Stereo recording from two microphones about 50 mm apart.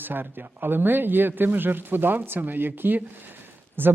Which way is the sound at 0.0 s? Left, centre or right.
Right.